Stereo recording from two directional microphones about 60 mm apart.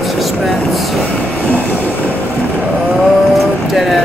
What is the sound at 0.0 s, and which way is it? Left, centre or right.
Vehicle, centre.